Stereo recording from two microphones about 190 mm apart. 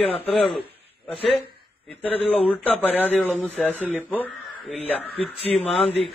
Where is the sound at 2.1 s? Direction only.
30° left (ahead or behind).